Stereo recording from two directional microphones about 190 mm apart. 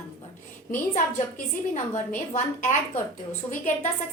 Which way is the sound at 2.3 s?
40° left (ahead or behind).